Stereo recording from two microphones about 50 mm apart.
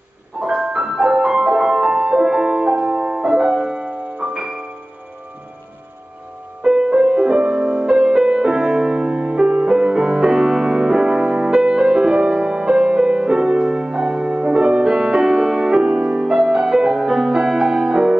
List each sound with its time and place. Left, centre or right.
0.4 s music: centre
6.6 s music: centre